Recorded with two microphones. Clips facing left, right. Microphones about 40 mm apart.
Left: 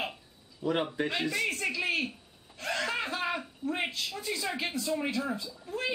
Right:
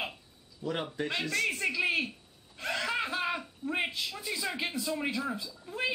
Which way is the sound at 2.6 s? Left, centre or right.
Centre.